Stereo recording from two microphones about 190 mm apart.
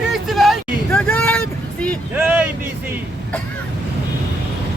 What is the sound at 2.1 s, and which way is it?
Speech, 10° right (ahead or behind).